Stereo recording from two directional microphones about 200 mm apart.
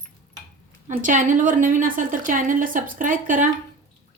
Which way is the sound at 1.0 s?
40° right (ahead or behind).